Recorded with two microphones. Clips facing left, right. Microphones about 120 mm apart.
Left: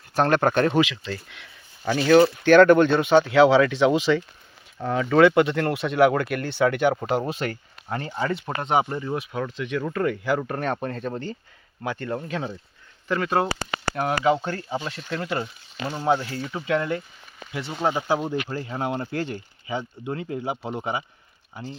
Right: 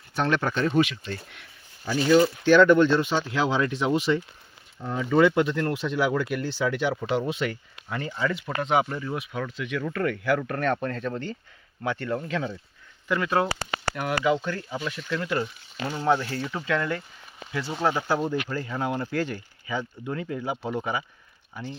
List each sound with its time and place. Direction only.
0.1 s speech: 45° left (ahead or behind)
0.5 s speech: 80° left
1.9 s speech: 60° left (ahead or behind); by 4.2 s 90° left
4.8 s speech: 80° left; by 21.0 s 25° left (ahead or behind)